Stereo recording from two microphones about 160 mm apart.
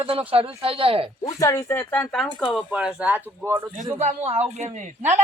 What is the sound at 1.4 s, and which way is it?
Speech, 20° left (ahead or behind).